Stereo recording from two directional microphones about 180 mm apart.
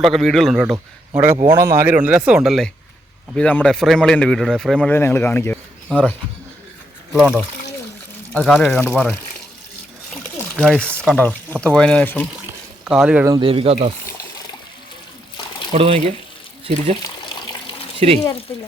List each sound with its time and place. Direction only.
0.0 s a man's voice: centre (ahead or behind)
1.1 s a man's voice: 15° right (ahead or behind); by 6.1 s 10° left (ahead or behind)
7.1 s a man's voice: 5° right (ahead or behind)
8.3 s a man's voice: 5° left (ahead or behind)
10.6 s a man's voice: 5° left (ahead or behind)
12.8 s speech: 5° right (ahead or behind)
13.2 s speech: 25° right (ahead or behind)
15.7 s speech: 35° right (ahead or behind)
17.0 s water: 25° left (ahead or behind)